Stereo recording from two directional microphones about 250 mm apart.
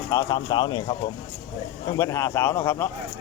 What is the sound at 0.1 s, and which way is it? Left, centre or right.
Speech, centre.